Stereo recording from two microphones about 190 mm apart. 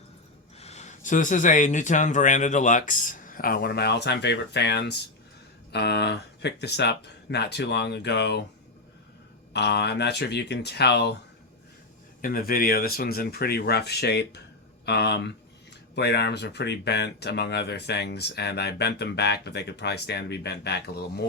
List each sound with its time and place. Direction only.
0.6 s speech: 35° left (ahead or behind); by 8.4 s 60° left (ahead or behind)
9.5 s speech: 60° left (ahead or behind)
12.2 s speech: 50° left (ahead or behind)